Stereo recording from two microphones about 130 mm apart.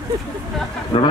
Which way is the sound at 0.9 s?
45° left (ahead or behind).